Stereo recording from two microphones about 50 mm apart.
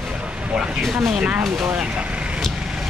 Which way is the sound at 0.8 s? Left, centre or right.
Centre.